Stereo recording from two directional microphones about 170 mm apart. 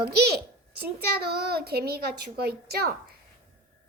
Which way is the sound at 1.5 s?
70° right (ahead or behind).